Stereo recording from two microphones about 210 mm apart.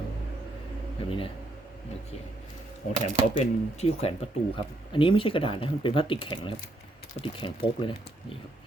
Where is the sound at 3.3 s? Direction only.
30° left (ahead or behind).